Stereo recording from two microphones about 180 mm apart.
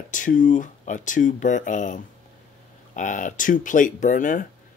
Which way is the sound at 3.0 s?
45° left (ahead or behind).